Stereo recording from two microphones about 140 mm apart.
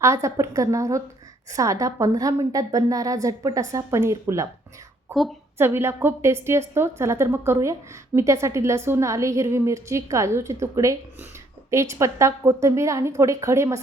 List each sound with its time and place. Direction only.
0.0 s a woman's voice: 20° right (ahead or behind)
5.5 s a woman's voice: 15° right (ahead or behind)